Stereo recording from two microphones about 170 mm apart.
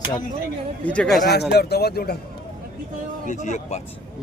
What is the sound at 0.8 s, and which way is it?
Speech, 5° left (ahead or behind).